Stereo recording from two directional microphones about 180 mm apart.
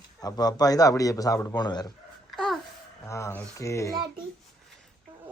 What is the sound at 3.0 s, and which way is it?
Speech, 15° left (ahead or behind).